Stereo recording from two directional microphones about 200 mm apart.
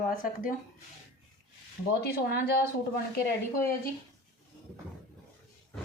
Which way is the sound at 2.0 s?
50° left (ahead or behind).